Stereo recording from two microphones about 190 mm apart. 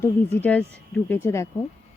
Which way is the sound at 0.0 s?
10° left (ahead or behind).